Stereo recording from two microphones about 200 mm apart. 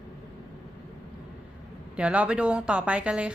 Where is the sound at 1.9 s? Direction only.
5° right (ahead or behind).